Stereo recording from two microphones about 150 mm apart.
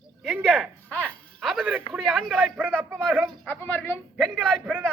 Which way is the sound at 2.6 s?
10° right (ahead or behind).